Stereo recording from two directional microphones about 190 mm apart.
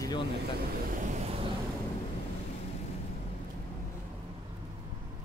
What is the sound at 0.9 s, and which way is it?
Vehicle, 40° right (ahead or behind).